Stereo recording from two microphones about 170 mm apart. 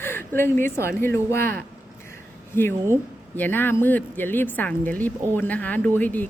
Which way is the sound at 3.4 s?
10° left (ahead or behind).